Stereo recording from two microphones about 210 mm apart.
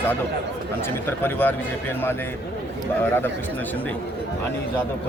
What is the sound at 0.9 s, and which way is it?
Speech, 10° left (ahead or behind).